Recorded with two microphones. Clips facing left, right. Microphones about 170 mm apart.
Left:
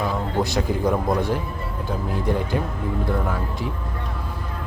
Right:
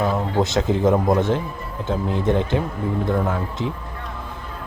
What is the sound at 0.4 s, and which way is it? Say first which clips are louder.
Speech: right 4 dB; 20° right (ahead or behind).